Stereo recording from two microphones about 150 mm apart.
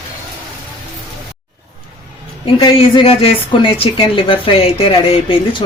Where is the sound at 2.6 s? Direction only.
30° left (ahead or behind).